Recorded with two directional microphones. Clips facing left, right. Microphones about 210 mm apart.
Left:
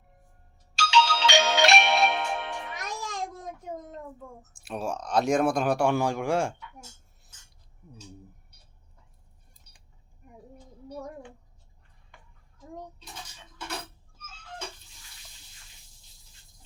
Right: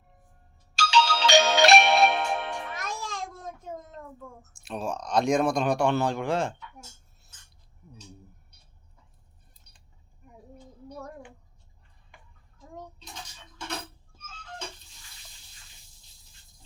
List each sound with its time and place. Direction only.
0.8 s music: 35° right (ahead or behind)
3.0 s a sound: 15° left (ahead or behind)
4.6 s speech: 10° left (ahead or behind)